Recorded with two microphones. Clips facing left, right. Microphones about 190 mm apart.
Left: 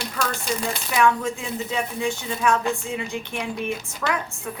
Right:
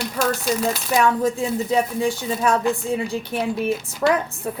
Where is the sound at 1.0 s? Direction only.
35° right (ahead or behind).